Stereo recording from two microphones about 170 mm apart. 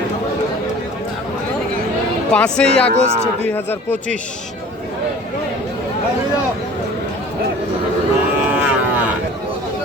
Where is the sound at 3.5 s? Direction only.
10° left (ahead or behind).